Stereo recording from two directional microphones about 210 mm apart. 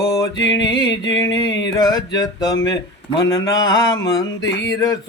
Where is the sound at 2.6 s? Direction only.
20° left (ahead or behind).